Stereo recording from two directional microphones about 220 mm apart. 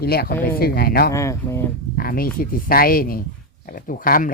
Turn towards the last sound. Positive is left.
turn(degrees=40)  # may be behind; listen again after turning